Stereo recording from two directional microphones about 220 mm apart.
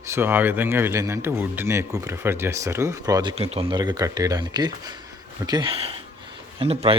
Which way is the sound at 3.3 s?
30° right (ahead or behind).